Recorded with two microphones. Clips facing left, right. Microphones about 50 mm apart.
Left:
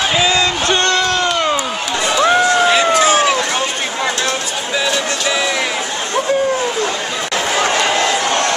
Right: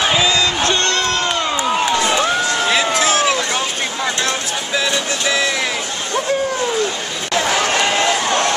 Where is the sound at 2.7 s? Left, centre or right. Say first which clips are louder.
Left 4 dB; centre.